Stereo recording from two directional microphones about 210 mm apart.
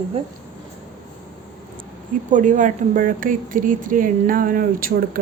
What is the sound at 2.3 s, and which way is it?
Speech, 35° right (ahead or behind).